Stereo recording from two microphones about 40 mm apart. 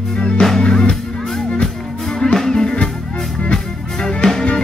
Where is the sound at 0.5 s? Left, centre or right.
Centre.